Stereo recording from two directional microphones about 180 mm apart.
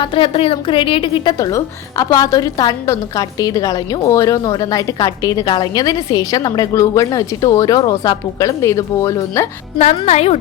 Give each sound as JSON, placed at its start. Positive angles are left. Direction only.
{"t": 0.0, "sound": "a woman's voice", "side_deg": 30}
{"t": 9.7, "sound": "a woman's voice", "side_deg": 40}